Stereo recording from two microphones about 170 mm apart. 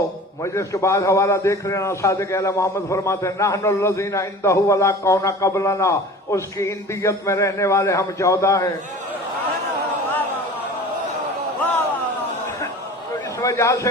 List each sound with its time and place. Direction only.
0.4 s a man's voice: 15° left (ahead or behind)
13.4 s a man's voice: 20° left (ahead or behind)